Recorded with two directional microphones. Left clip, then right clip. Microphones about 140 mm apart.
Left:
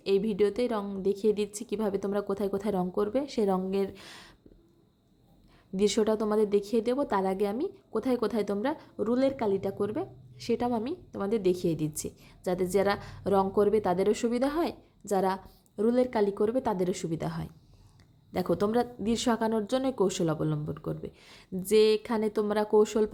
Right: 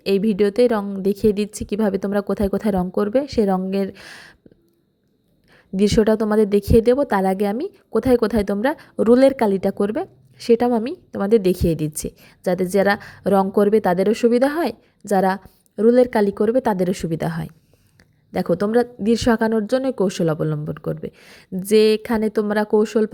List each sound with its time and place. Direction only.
0.0 s a woman's voice: 45° right (ahead or behind)
5.7 s a woman's voice: 40° right (ahead or behind)
18.3 s a woman's voice: 35° right (ahead or behind)